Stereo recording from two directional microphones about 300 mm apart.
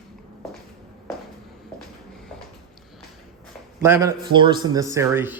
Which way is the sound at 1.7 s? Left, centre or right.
Centre.